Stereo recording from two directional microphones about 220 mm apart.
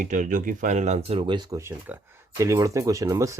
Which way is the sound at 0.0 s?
35° right (ahead or behind).